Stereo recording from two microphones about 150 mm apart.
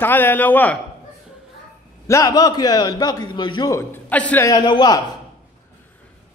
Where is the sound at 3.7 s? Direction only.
10° left (ahead or behind).